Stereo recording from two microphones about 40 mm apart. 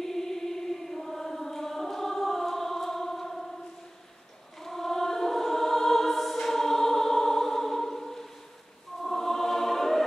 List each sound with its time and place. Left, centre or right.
0.0 s chant: centre
4.6 s choir: centre